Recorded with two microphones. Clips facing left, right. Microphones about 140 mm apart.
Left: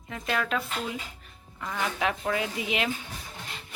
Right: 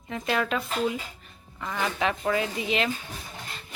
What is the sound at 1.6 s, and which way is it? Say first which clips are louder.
A woman's voice: right 2 dB; centre (ahead or behind).